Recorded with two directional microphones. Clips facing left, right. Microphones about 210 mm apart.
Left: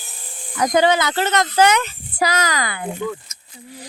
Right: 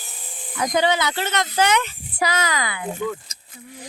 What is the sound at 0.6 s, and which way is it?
Speech, 45° left (ahead or behind).